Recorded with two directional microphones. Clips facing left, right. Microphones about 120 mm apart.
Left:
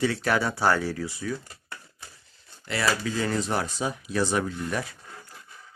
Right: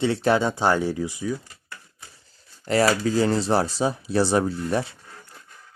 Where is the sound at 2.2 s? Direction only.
40° right (ahead or behind).